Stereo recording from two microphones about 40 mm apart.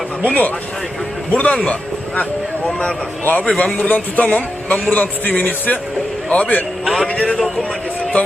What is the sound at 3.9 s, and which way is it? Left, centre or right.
A man's voice, left.